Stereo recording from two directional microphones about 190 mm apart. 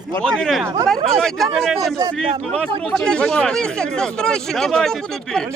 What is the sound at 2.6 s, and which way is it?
Speech, 5° left (ahead or behind).